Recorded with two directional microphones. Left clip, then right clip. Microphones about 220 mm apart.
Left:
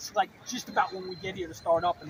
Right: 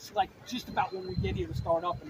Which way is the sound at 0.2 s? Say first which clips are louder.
Left 2 dB; 10° right (ahead or behind).